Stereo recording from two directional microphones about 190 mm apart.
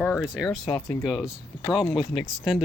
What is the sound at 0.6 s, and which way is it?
Speech, 20° left (ahead or behind).